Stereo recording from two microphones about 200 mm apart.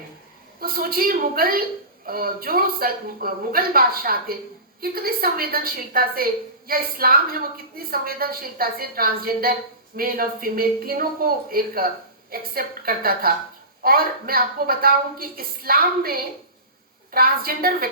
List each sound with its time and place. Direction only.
0.6 s a woman's voice: 45° right (ahead or behind)